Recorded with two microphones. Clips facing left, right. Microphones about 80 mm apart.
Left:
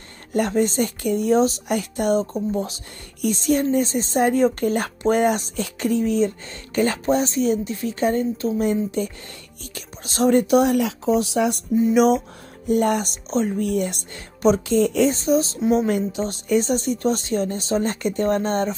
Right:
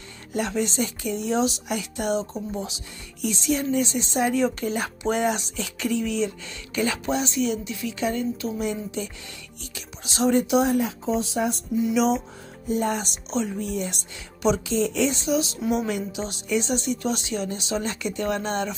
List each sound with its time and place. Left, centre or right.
0.3 s speech: left
10.7 s speech: left
11.8 s a woman's voice: left